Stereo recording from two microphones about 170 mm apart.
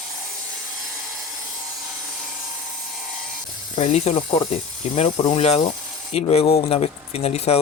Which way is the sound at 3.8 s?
40° left (ahead or behind).